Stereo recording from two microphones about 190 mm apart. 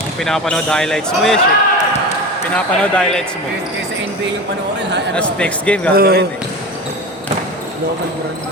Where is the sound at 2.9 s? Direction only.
5° left (ahead or behind).